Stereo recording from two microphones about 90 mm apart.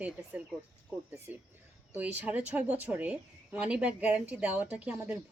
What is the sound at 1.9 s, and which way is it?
A woman's voice, 20° right (ahead or behind).